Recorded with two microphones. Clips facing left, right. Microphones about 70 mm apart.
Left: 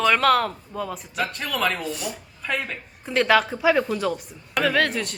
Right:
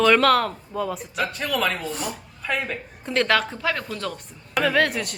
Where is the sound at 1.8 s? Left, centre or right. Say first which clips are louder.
Even; right.